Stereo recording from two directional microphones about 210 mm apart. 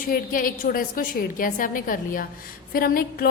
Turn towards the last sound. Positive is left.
turn(degrees=45)  # may be behind; listen again after turning